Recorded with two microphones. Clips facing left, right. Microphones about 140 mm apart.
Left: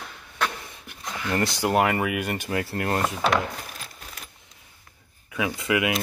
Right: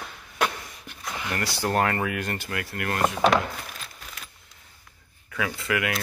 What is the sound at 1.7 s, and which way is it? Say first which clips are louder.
Speech: left 1 dB; 10° left (ahead or behind).